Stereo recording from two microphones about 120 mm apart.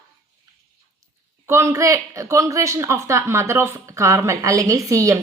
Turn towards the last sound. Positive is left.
turn(degrees=-25)  # may be behind; listen again after turning